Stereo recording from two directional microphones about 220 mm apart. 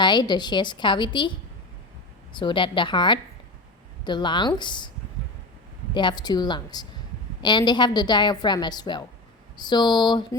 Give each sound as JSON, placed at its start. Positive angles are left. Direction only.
{"t": 0.0, "sound": "a woman's voice", "side_deg": 20}
{"t": 2.3, "sound": "a woman's voice", "side_deg": 20}
{"t": 5.9, "sound": "a woman's voice", "side_deg": 20}